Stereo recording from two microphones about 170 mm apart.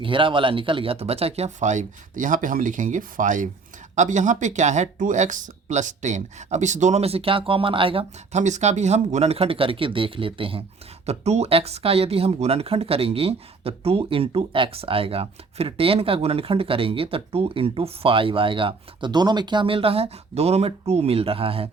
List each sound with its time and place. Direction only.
0.0 s speech: 30° right (ahead or behind)